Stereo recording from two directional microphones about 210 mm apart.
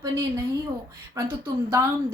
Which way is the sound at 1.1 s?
15° right (ahead or behind).